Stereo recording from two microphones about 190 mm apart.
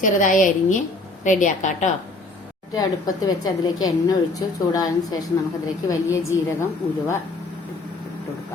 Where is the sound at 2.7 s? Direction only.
20° left (ahead or behind).